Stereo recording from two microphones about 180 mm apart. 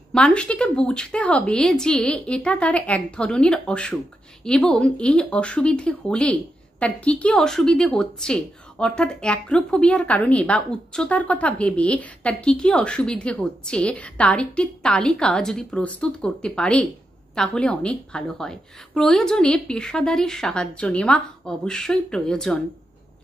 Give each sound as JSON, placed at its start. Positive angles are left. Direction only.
{"t": 0.1, "sound": "a woman's voice", "side_deg": 5}